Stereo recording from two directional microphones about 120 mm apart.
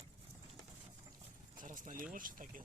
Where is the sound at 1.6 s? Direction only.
90° right.